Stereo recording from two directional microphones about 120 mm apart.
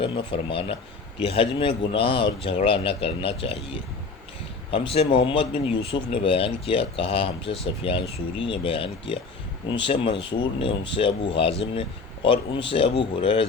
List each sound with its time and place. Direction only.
0.0 s speech: 45° left (ahead or behind)